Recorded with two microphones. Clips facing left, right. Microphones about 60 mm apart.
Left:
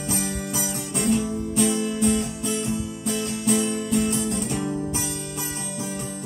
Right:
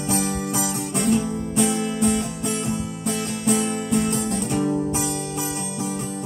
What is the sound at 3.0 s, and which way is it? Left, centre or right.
Music, right.